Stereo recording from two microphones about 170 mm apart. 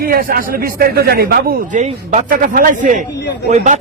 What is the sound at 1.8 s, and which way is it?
A man's voice, 45° right (ahead or behind).